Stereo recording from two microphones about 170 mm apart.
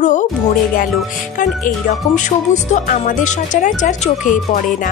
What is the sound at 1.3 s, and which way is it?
Speech, 50° left (ahead or behind).